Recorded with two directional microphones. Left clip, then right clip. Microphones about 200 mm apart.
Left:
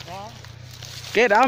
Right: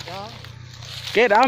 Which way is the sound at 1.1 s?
10° left (ahead or behind).